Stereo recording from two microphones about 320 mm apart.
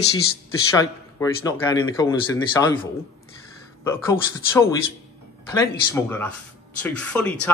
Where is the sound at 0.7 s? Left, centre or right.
Centre.